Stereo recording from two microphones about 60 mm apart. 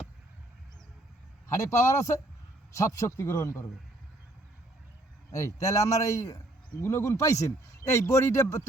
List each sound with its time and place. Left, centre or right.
1.5 s a man's voice: left
5.3 s a man's voice: left